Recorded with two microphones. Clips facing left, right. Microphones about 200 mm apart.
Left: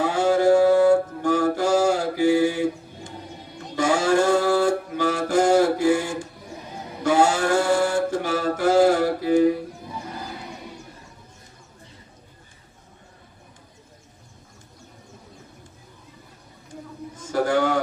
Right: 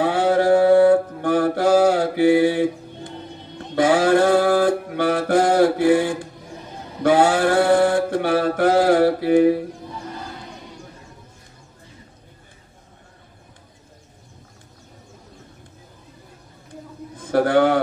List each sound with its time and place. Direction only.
0.0 s mantra: 60° right (ahead or behind)
3.7 s music: 60° right (ahead or behind)
7.0 s mantra: 60° right (ahead or behind)
17.2 s a sound: 60° right (ahead or behind)